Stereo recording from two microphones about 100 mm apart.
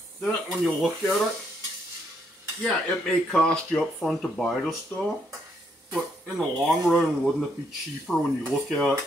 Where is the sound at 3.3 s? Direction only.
10° left (ahead or behind).